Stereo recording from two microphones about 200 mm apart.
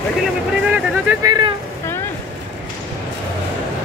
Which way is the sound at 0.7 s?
15° right (ahead or behind).